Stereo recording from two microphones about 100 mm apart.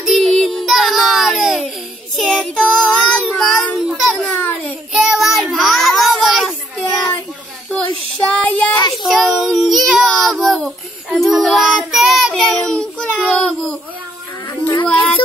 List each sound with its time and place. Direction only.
0.0 s child singing: 5° left (ahead or behind)
3.9 s music: centre (ahead or behind)
4.9 s child singing: 5° right (ahead or behind)
8.3 s a sound: 10° left (ahead or behind)
9.0 s child singing: centre (ahead or behind)
10.0 s baby cry: 5° left (ahead or behind)
10.4 s child singing: centre (ahead or behind)
14.7 s a sound: 55° left (ahead or behind)